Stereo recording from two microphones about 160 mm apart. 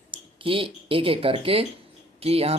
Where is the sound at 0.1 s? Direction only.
35° right (ahead or behind).